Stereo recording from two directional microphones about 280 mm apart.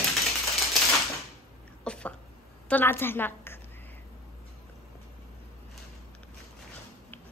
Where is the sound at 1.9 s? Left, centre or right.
Centre.